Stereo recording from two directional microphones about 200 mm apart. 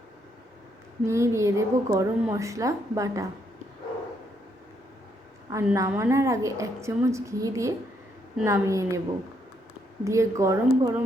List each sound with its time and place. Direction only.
1.0 s a woman's voice: 15° right (ahead or behind)
5.5 s a woman's voice: 15° right (ahead or behind)
10.0 s a woman's voice: 15° right (ahead or behind)